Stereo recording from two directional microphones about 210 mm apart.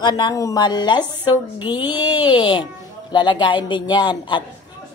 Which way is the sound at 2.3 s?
20° left (ahead or behind).